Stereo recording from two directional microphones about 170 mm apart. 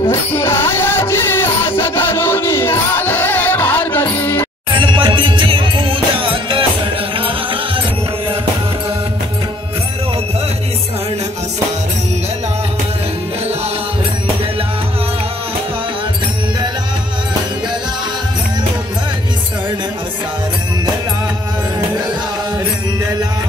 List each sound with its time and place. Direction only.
0.0 s music: 15° left (ahead or behind)
4.7 s music: 30° right (ahead or behind)